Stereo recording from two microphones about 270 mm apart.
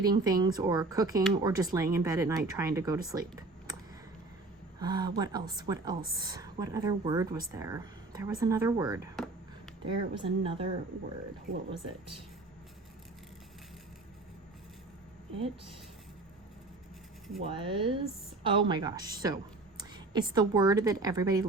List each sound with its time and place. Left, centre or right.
0.0 s a woman's voice: centre
3.1 s a sound: centre
4.8 s a woman's voice: centre
9.1 s a sound: centre
9.8 s speech: centre
17.4 s a woman's voice: centre